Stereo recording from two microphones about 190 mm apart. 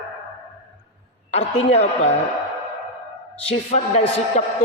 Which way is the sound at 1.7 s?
35° left (ahead or behind).